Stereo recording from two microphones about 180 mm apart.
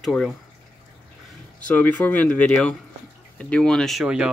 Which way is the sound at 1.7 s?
10° left (ahead or behind).